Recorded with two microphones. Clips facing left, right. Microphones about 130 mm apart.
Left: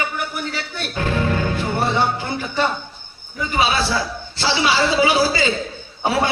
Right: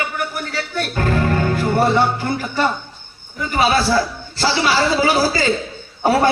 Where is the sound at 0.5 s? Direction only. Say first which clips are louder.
Right 4 dB; 45° right (ahead or behind).